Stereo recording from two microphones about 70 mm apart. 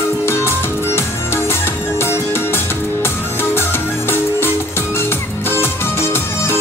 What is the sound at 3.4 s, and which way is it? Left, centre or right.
Music, left.